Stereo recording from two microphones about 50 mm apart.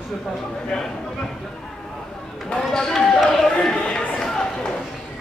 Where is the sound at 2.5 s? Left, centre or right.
Centre.